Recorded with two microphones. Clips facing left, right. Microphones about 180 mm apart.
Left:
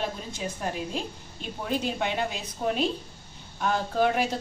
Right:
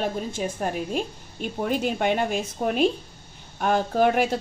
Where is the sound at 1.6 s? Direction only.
55° right (ahead or behind).